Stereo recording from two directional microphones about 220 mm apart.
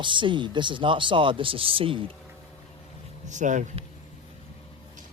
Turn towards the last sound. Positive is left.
turn(degrees=-35)  # may be behind; listen again after turning